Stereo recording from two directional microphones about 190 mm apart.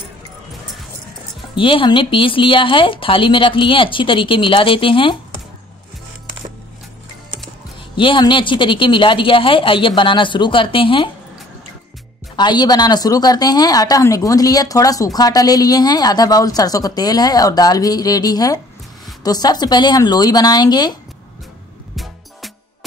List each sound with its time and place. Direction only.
1.5 s a woman's voice: 25° left (ahead or behind)
7.9 s a woman's voice: 25° left (ahead or behind)
12.4 s a woman's voice: 20° left (ahead or behind)
21.9 s music: centre (ahead or behind)